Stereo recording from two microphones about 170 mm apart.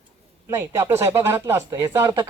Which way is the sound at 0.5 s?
15° right (ahead or behind).